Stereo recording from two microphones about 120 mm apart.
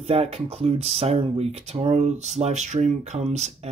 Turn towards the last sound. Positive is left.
turn(degrees=-65)  # may be behind; listen again after turning